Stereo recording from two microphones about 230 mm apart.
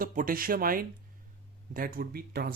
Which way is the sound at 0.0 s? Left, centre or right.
Right.